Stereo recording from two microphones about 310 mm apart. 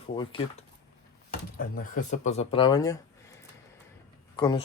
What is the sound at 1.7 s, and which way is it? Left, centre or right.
Speech, left.